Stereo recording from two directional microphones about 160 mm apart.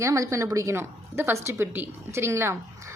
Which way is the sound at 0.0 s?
20° right (ahead or behind).